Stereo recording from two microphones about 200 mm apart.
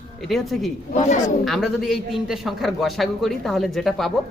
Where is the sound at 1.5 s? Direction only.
Centre (ahead or behind).